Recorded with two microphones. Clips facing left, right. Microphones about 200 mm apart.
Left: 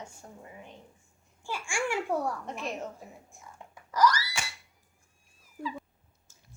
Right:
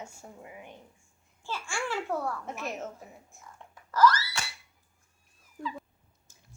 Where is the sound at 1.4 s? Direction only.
15° left (ahead or behind).